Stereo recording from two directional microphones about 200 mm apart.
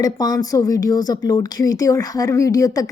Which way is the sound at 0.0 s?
20° left (ahead or behind).